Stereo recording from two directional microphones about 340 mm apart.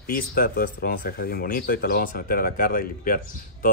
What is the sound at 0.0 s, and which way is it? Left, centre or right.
Speech, left.